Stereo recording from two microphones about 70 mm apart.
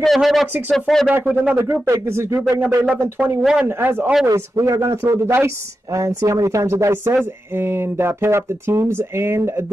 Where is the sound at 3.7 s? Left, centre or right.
Right.